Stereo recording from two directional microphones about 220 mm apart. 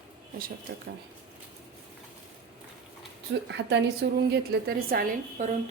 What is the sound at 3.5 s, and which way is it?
Speech, 55° right (ahead or behind).